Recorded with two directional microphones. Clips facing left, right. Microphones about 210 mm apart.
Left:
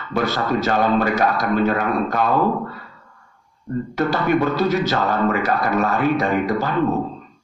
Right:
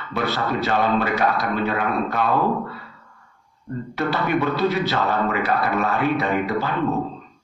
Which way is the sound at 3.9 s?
45° left (ahead or behind).